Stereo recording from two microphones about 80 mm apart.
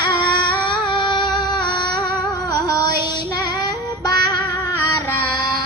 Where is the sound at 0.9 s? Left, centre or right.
Left.